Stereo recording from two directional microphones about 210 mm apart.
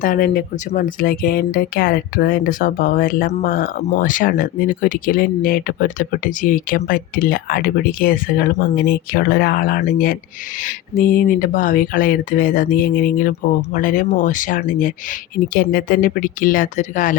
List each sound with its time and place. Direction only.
0.0 s speech: 40° left (ahead or behind)